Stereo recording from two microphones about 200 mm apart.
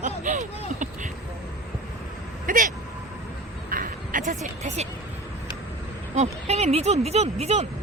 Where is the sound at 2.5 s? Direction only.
45° right (ahead or behind).